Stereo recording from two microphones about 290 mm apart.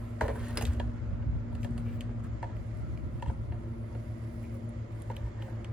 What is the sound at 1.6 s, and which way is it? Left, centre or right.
Vehicle, centre.